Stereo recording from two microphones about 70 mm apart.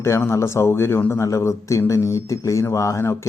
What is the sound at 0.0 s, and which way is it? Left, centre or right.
A man's voice, left.